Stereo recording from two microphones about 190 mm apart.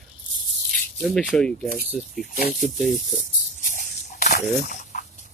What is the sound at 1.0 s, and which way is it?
Speech, centre (ahead or behind).